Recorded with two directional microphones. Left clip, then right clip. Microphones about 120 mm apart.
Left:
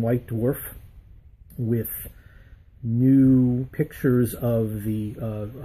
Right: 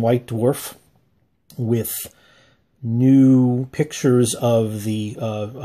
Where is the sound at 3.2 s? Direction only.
15° right (ahead or behind).